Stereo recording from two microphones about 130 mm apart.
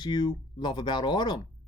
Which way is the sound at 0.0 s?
35° left (ahead or behind).